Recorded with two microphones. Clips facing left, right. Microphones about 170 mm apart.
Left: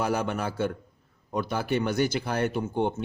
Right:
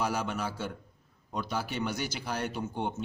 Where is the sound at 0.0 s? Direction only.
55° left (ahead or behind).